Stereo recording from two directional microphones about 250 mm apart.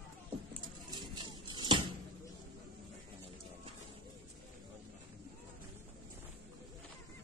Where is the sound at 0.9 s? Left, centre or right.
Centre.